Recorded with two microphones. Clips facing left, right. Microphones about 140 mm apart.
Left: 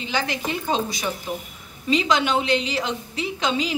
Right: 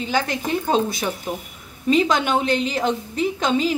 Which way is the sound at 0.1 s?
45° right (ahead or behind).